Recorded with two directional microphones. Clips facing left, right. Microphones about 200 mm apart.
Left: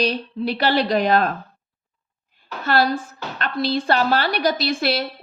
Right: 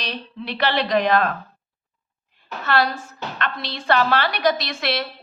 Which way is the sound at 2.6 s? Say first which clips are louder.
Left 2 dB; 35° left (ahead or behind).